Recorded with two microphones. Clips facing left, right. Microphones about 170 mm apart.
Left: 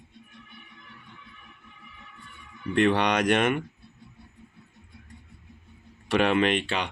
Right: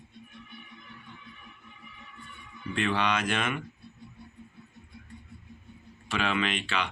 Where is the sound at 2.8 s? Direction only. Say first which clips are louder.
Left 7 dB; 60° left (ahead or behind).